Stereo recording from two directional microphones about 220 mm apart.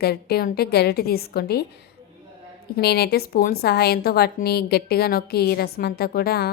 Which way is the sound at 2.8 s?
45° left (ahead or behind).